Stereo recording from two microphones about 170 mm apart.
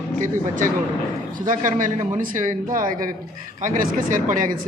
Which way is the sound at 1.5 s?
50° right (ahead or behind).